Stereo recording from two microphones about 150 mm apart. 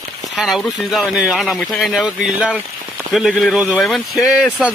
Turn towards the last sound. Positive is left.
turn(degrees=-5)  # may be behind; listen again after turning